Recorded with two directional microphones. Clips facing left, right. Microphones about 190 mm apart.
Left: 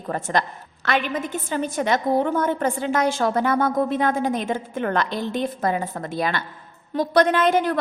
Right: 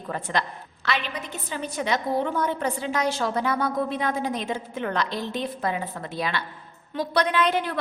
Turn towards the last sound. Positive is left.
turn(degrees=45)  # may be behind; listen again after turning